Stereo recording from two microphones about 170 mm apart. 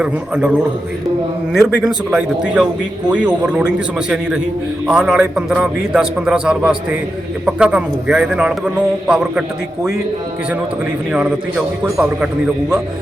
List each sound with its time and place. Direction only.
0.0 s a man's voice: 5° right (ahead or behind)
1.5 s a man's voice: 5° right (ahead or behind)
11.1 s a man's voice: 5° right (ahead or behind)